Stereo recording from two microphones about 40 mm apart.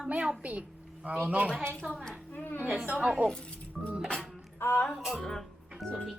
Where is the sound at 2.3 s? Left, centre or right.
Left.